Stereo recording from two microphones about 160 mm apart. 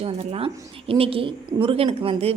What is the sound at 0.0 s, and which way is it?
A woman's voice, 35° right (ahead or behind).